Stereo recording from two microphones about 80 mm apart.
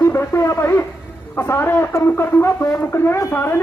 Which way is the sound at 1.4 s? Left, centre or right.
Left.